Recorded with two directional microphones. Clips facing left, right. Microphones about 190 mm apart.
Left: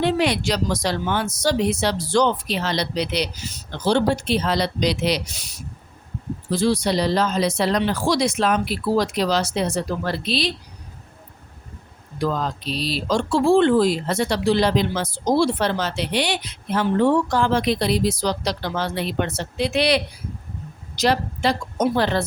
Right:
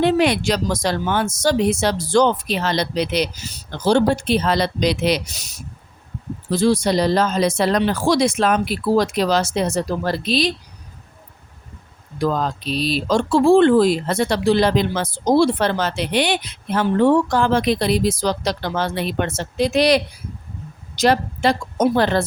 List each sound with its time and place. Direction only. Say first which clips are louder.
0.0 s speech: right 4 dB; 55° right (ahead or behind)
12.2 s a woman's voice: right 3 dB; 50° right (ahead or behind)